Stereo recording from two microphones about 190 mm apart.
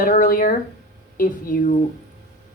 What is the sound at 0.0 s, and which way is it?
Speech, 45° left (ahead or behind).